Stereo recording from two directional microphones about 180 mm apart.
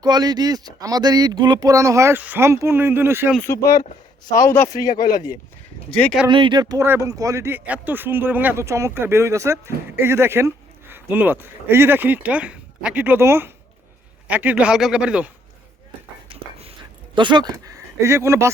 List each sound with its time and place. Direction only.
0.0 s speech: 20° right (ahead or behind)
3.4 s speech: 15° left (ahead or behind)
5.9 s speech: 5° left (ahead or behind)
6.2 s speech: 25° right (ahead or behind); by 15.3 s 5° right (ahead or behind)
16.3 s a sound: 35° right (ahead or behind)
17.2 s speech: 25° right (ahead or behind)